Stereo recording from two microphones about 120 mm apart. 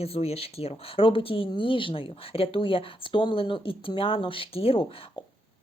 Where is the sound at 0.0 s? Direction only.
55° left (ahead or behind).